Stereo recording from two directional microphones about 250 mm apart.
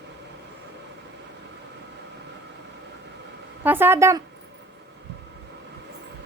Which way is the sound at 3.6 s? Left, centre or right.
Centre.